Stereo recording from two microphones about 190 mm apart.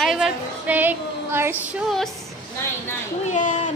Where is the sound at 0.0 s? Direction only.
Centre (ahead or behind).